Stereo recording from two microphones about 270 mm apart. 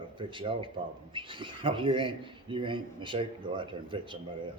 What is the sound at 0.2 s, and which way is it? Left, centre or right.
Speech, centre.